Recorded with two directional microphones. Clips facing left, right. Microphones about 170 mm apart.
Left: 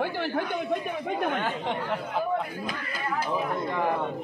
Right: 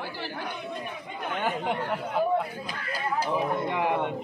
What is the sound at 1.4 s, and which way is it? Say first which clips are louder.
Speech: right 1 dB; 10° right (ahead or behind).